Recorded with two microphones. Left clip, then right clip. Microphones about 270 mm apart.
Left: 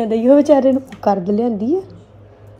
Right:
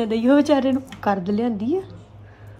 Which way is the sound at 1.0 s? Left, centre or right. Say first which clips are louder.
Left 6 dB; right.